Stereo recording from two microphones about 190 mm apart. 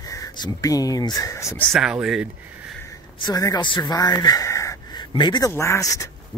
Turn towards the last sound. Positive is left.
turn(degrees=15)  # may be behind; listen again after turning